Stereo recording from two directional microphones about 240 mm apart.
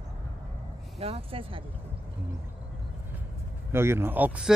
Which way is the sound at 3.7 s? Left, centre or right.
Centre.